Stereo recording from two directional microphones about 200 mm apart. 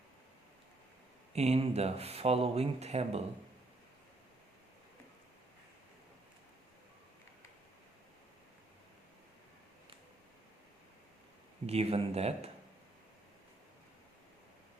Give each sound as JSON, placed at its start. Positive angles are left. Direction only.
{"t": 1.3, "sound": "speech", "side_deg": -30}
{"t": 11.6, "sound": "speech", "side_deg": -30}